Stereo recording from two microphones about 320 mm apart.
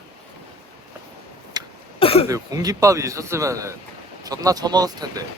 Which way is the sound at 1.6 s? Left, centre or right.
Centre.